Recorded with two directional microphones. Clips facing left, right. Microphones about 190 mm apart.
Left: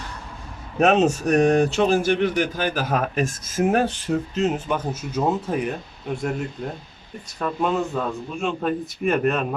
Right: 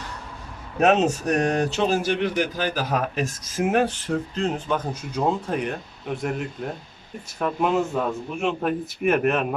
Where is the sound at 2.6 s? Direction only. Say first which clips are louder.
Left 1 dB; 55° left (ahead or behind).